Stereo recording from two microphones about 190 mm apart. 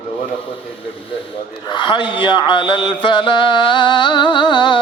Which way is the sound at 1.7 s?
25° left (ahead or behind).